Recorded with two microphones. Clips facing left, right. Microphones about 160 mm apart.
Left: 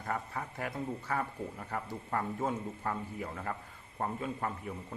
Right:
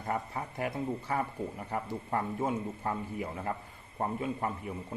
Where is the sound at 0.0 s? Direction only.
25° right (ahead or behind).